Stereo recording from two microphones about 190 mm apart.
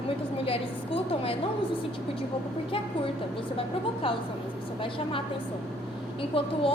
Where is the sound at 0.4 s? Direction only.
30° left (ahead or behind).